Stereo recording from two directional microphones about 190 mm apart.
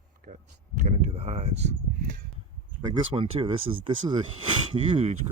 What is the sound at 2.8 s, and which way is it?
Speech, 25° right (ahead or behind).